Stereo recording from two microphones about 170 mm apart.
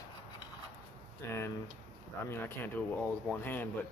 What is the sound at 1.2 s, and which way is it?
Speech, 15° left (ahead or behind).